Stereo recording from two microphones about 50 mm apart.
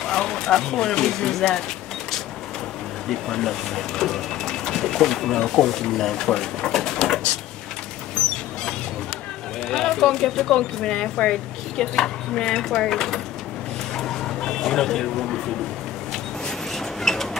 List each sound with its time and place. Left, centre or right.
0.0 s speech: centre
3.1 s speech: centre
8.2 s dog: centre
9.7 s speech: centre
13.9 s vehicle: centre
14.6 s speech: centre
16.7 s a sound: centre